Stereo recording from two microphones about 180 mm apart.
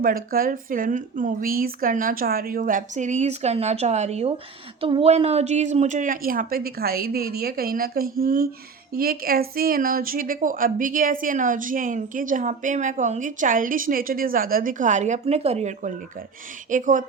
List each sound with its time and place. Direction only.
0.0 s a woman's voice: 55° right (ahead or behind)